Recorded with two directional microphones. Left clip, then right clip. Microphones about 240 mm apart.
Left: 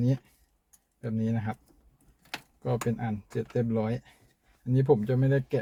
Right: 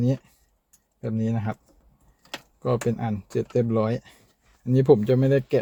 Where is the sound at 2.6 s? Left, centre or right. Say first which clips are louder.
Right 6 dB; right.